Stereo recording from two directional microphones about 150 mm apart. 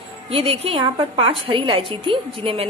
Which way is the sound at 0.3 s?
40° right (ahead or behind).